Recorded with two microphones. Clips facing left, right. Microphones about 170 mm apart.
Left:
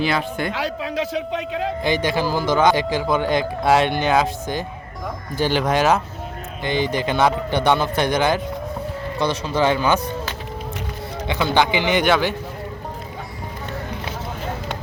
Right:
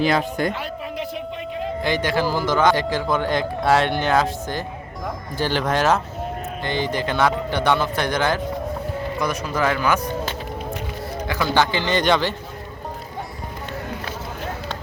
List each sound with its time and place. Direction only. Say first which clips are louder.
0.0 s a man's voice: right 2 dB; 40° right (ahead or behind)
0.5 s a man's voice: left 4 dB; 90° left
1.8 s speech: even; 15° left (ahead or behind)
9.1 s speech: left 4 dB; 30° left (ahead or behind)
11.3 s speech: left 2 dB; 20° left (ahead or behind)